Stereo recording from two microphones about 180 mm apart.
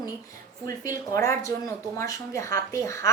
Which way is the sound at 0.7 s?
20° left (ahead or behind).